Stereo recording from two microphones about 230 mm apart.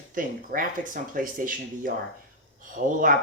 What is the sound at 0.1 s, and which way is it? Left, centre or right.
Speech, right.